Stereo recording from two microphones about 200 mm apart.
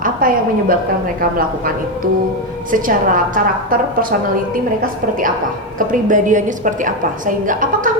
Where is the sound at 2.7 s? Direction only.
40° right (ahead or behind).